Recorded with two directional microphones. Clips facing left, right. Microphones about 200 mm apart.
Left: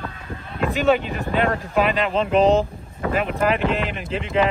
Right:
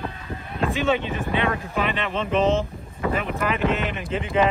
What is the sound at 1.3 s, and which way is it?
Speech, 45° left (ahead or behind).